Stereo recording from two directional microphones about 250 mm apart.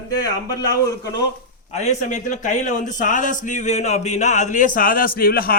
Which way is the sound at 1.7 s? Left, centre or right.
Left.